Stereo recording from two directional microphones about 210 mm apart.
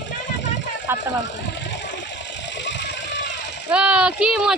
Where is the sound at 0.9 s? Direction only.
10° right (ahead or behind).